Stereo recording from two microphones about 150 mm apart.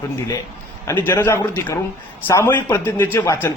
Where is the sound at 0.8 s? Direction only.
15° left (ahead or behind).